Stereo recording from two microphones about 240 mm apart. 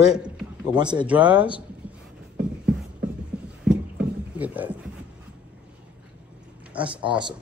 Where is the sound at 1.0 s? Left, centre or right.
Centre.